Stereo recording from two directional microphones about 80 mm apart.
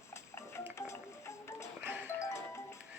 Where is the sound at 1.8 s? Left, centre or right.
Right.